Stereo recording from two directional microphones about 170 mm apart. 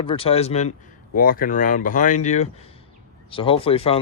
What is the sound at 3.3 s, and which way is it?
Speech, 30° left (ahead or behind).